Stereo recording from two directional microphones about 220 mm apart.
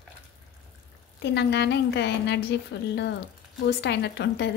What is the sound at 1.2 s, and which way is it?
A woman's voice, 50° left (ahead or behind).